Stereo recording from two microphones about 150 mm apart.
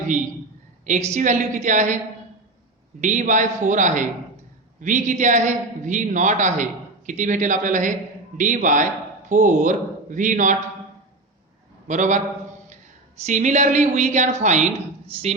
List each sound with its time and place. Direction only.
0.9 s a woman's voice: 50° right (ahead or behind)
3.0 s a man's voice: 55° right (ahead or behind)
11.9 s a man's voice: 55° right (ahead or behind)
13.2 s a woman's voice: 55° right (ahead or behind)